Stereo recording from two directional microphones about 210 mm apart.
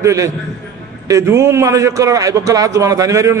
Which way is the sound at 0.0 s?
15° right (ahead or behind).